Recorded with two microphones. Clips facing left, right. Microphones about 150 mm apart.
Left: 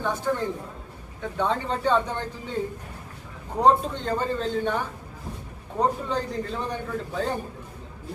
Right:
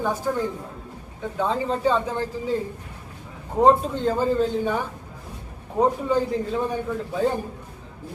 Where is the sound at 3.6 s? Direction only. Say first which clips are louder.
Right 3 dB; 5° right (ahead or behind).